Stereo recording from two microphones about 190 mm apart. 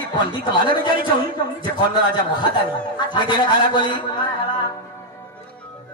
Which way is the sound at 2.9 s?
25° left (ahead or behind).